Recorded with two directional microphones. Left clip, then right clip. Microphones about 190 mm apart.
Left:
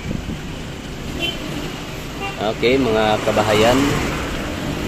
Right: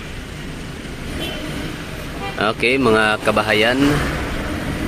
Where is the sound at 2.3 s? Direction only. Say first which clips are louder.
Even; 20° right (ahead or behind).